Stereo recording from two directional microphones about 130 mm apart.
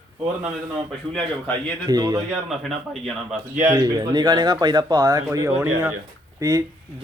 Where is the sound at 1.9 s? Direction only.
30° right (ahead or behind).